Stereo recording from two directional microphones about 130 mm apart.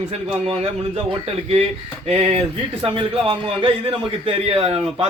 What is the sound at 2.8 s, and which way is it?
A man's voice, 45° right (ahead or behind).